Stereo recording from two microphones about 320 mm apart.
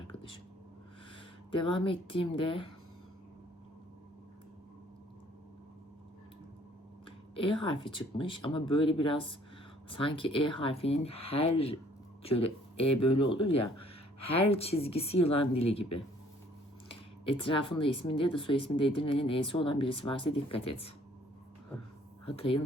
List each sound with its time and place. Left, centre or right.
0.1 s a sound: centre
1.5 s speech: centre
7.6 s speech: centre
16.9 s a sound: centre
17.7 s speech: centre
22.3 s speech: centre